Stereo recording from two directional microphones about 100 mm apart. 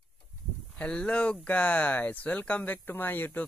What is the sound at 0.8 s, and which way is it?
Speech, 10° left (ahead or behind).